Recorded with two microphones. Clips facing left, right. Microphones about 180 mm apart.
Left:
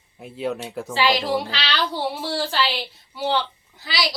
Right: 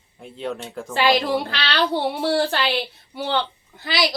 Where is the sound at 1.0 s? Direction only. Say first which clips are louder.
Right 2 dB; 55° right (ahead or behind).